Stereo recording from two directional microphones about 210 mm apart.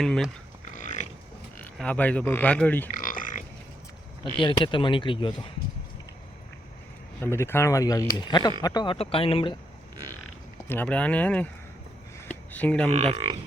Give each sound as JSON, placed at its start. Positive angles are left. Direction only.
{"t": 0.0, "sound": "speech", "side_deg": 0}
{"t": 0.7, "sound": "pig", "side_deg": 35}
{"t": 1.8, "sound": "speech", "side_deg": 5}
{"t": 2.9, "sound": "a sound", "side_deg": 40}
{"t": 4.4, "sound": "speech", "side_deg": 25}
{"t": 7.2, "sound": "speech", "side_deg": 10}
{"t": 10.7, "sound": "speech", "side_deg": 5}
{"t": 12.9, "sound": "speech", "side_deg": -30}